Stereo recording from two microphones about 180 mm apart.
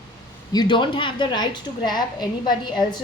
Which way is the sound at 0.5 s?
25° left (ahead or behind).